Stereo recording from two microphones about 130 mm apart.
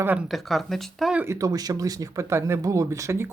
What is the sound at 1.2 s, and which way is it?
Speech, 25° right (ahead or behind).